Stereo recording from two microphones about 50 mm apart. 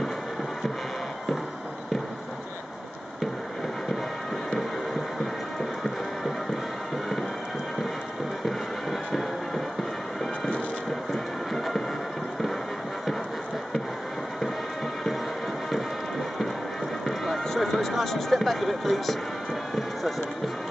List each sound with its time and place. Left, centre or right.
11.5 s a sound: centre
17.0 s basketball bounce: centre
19.7 s music: centre